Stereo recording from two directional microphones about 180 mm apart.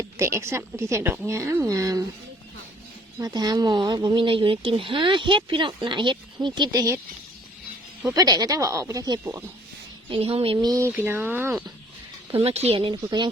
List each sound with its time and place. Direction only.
0.2 s a woman's voice: 15° right (ahead or behind)
3.2 s speech: 20° right (ahead or behind)
8.1 s speech: 20° right (ahead or behind)
10.1 s speech: 30° right (ahead or behind); by 11.5 s 10° right (ahead or behind)
12.3 s speech: 35° right (ahead or behind)